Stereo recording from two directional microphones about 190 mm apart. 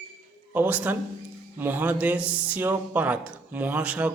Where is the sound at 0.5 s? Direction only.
10° right (ahead or behind).